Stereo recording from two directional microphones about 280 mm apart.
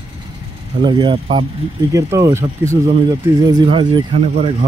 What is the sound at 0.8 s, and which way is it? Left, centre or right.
Speech, centre.